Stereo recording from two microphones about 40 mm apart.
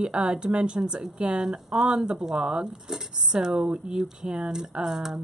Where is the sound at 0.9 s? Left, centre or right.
Centre.